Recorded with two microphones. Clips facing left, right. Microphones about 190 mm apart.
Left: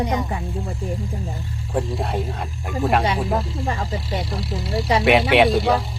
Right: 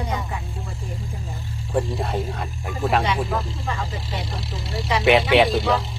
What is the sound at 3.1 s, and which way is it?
Speech, 35° left (ahead or behind).